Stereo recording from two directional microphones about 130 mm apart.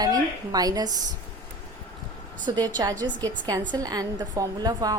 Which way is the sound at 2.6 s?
30° right (ahead or behind).